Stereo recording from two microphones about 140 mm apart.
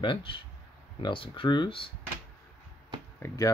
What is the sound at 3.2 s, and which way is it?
Speech, 25° left (ahead or behind).